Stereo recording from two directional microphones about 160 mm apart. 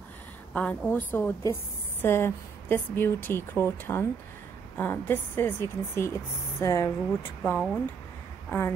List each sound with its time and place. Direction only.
0.5 s a woman's voice: 10° left (ahead or behind)
7.1 s speech: centre (ahead or behind)
8.5 s speech: 15° left (ahead or behind)